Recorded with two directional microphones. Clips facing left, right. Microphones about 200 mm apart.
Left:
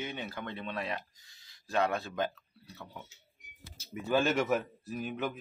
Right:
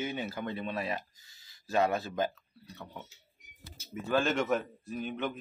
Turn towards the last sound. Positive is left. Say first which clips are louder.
# even
turn(degrees=5)  # may be behind; listen again after turning